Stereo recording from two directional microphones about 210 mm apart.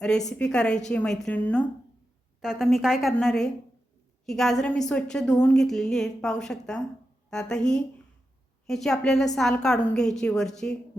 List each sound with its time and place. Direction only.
0.3 s a woman's voice: 5° left (ahead or behind)